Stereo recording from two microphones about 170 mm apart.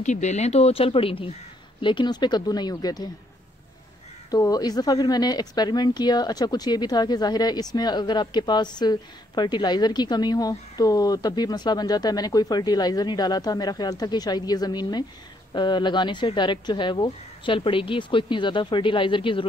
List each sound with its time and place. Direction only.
0.0 s a woman's voice: 45° left (ahead or behind); by 3.1 s 25° left (ahead or behind)
4.3 s a woman's voice: 20° left (ahead or behind)